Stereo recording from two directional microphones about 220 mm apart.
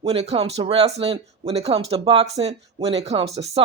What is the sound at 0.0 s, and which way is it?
A woman's voice, 25° right (ahead or behind).